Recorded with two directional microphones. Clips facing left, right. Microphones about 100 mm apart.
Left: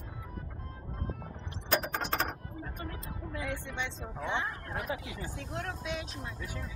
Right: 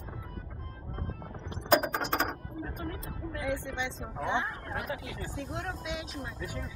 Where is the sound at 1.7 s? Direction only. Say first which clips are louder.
Right 5 dB; 15° right (ahead or behind).